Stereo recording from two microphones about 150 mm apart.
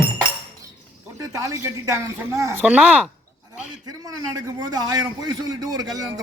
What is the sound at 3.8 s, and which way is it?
A man's voice, 25° right (ahead or behind).